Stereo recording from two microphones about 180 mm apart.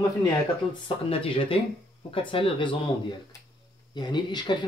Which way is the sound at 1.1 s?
30° left (ahead or behind).